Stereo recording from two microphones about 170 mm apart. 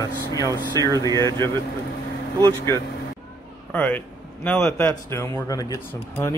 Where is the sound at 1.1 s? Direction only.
15° left (ahead or behind).